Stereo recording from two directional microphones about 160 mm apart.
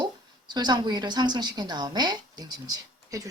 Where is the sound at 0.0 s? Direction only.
25° right (ahead or behind).